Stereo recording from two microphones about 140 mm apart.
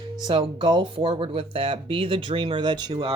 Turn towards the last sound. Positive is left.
turn(degrees=-35)  # may be behind; listen again after turning